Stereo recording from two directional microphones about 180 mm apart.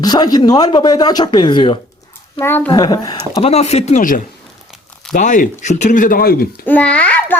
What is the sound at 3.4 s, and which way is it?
Speech, 35° left (ahead or behind).